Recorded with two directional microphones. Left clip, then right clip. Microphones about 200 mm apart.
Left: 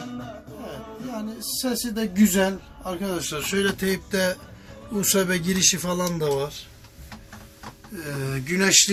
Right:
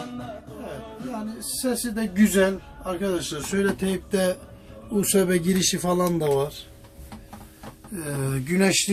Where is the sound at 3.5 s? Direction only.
Centre (ahead or behind); by 6.6 s 20° right (ahead or behind).